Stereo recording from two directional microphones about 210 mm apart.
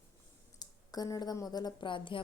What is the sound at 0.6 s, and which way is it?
Speech, 20° left (ahead or behind).